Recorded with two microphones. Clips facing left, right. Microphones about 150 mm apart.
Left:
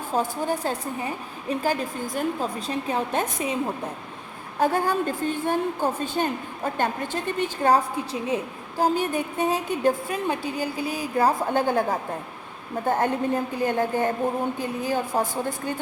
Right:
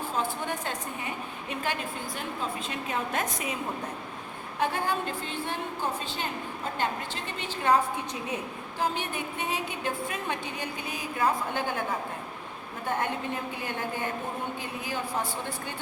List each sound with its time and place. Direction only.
0.2 s a woman's voice: 35° left (ahead or behind)
4.6 s a woman's voice: 40° left (ahead or behind)